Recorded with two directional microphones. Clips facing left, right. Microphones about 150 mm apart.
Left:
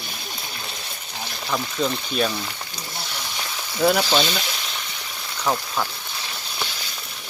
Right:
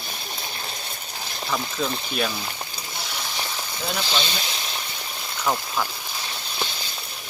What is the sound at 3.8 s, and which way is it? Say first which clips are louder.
Speech: left 9 dB; 60° left (ahead or behind).